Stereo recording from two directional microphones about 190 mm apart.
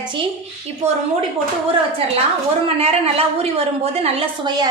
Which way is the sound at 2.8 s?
30° right (ahead or behind).